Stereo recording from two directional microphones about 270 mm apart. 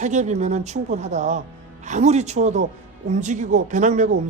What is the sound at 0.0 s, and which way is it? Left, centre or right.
Speech, right.